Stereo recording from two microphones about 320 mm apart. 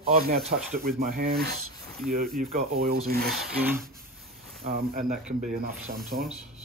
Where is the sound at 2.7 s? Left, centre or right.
Right.